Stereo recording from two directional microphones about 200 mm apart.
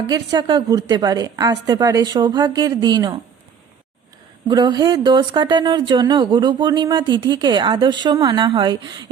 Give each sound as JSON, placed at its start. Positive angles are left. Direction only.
{"t": 0.1, "sound": "speech", "side_deg": -20}
{"t": 4.4, "sound": "speech", "side_deg": -20}